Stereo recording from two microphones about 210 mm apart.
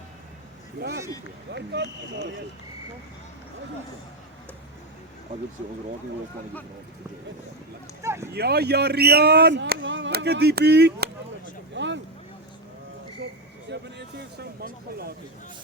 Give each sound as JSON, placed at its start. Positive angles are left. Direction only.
{"t": 0.8, "sound": "speech", "side_deg": -50}
{"t": 8.0, "sound": "a sound", "side_deg": -15}
{"t": 8.3, "sound": "speech", "side_deg": -50}
{"t": 11.7, "sound": "vehicle", "side_deg": -60}
{"t": 14.2, "sound": "speech", "side_deg": -50}